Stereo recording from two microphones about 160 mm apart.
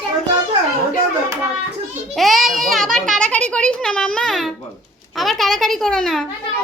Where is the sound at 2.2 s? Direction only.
Centre (ahead or behind).